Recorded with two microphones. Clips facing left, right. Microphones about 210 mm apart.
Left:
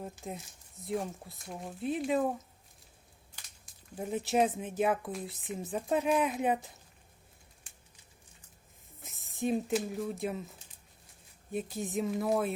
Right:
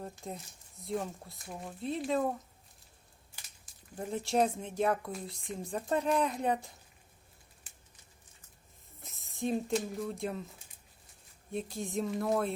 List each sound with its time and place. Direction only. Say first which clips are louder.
0.0 s speech: left 1 dB; 5° left (ahead or behind)
3.9 s speech: left 1 dB; 5° left (ahead or behind)
9.0 s speech: left 2 dB; centre (ahead or behind)
11.5 s speech: left 1 dB; centre (ahead or behind)